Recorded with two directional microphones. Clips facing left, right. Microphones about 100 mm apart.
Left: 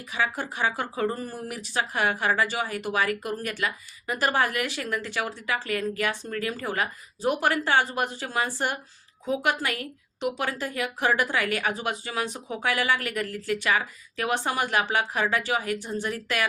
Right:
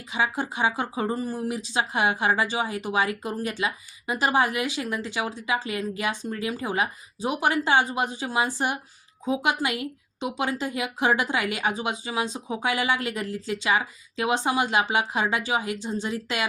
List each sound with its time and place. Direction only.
0.1 s speech: 15° right (ahead or behind)